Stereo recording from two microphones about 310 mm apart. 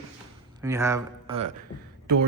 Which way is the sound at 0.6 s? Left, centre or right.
Centre.